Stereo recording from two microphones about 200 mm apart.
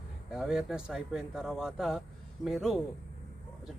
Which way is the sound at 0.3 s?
5° right (ahead or behind).